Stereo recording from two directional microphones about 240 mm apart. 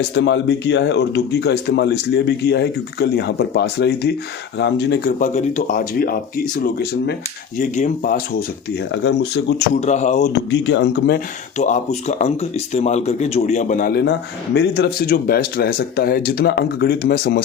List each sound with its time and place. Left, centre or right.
0.1 s speech: left
7.6 s speech: left
9.8 s speech: left
10.5 s speech: left
11.5 s speech: left